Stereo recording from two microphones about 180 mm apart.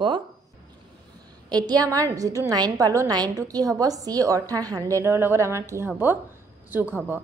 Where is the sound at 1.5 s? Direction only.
20° right (ahead or behind).